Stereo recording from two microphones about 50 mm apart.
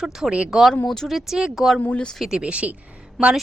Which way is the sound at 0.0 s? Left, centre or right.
Centre.